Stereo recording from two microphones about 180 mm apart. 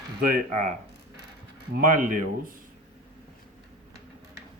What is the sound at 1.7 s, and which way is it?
Speech, 50° right (ahead or behind).